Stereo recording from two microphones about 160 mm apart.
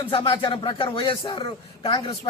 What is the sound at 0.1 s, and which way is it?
A man's voice, 35° left (ahead or behind).